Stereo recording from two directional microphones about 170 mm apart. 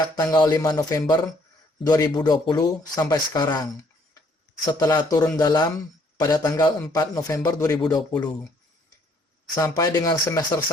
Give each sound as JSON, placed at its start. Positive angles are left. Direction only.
{"t": 0.2, "sound": "speech", "side_deg": 20}
{"t": 9.6, "sound": "speech", "side_deg": 20}